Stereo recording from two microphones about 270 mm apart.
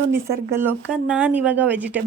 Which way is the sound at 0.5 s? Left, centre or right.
Centre.